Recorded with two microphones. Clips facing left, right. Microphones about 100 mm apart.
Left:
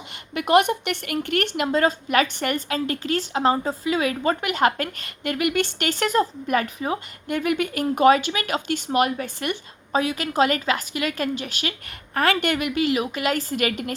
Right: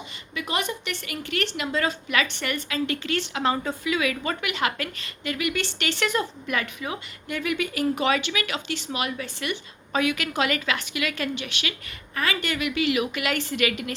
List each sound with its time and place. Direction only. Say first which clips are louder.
0.3 s a woman's voice: left 10 dB; 55° left (ahead or behind)
9.9 s a woman's voice: left 2 dB; 35° left (ahead or behind)
12.1 s a woman's voice: left 6 dB; 55° left (ahead or behind)